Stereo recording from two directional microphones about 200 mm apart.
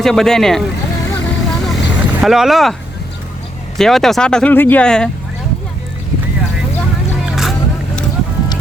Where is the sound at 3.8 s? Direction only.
Centre (ahead or behind).